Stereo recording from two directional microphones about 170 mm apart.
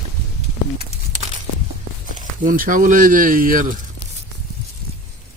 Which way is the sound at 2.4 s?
50° right (ahead or behind).